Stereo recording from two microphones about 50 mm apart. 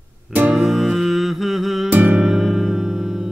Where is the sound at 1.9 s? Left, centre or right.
Right.